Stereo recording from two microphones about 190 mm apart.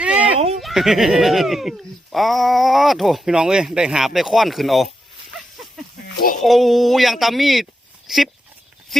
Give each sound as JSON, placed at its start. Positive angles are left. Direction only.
{"t": 0.6, "sound": "speech", "side_deg": 0}
{"t": 6.1, "sound": "a sound", "side_deg": 45}
{"t": 6.4, "sound": "speech", "side_deg": 0}